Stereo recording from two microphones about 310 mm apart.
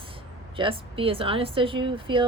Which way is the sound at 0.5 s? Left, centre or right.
Centre.